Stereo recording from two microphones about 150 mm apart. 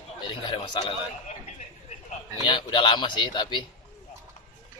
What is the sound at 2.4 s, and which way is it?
Speech, 30° left (ahead or behind).